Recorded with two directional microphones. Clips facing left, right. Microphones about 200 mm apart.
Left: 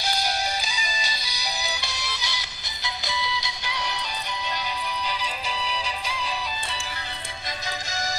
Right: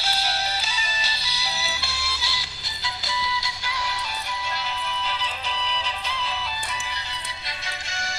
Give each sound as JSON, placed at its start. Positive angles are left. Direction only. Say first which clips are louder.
{"t": 0.0, "sound": "music", "louder": "left 1 dB", "side_deg": 15}
{"t": 5.2, "sound": "music", "louder": "even", "side_deg": 10}